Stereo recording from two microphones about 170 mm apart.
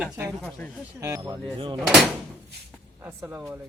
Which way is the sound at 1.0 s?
20° right (ahead or behind).